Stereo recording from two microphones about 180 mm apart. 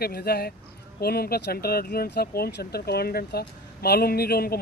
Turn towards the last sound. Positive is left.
turn(degrees=60)  # may be behind; listen again after turning